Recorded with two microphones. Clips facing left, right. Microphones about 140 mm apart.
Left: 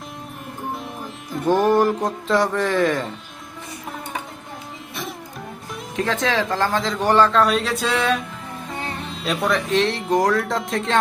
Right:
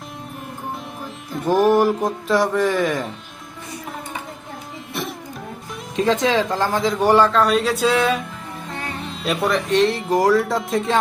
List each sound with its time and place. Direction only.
1.5 s speech: 5° right (ahead or behind)
6.0 s a man's voice: 15° right (ahead or behind)
7.3 s speech: centre (ahead or behind)